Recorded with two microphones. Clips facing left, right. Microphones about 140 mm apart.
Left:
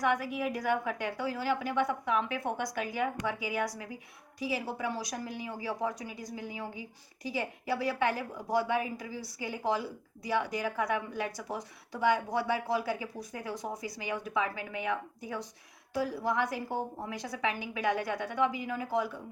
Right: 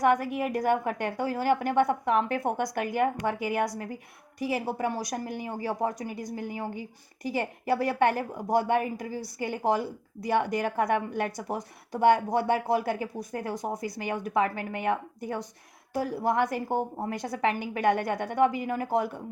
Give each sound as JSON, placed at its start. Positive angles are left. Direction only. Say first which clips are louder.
{"t": 0.0, "sound": "a woman's voice", "louder": "right 6 dB", "side_deg": -50}